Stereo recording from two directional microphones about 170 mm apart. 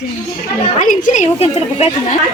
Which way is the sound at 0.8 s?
50° left (ahead or behind).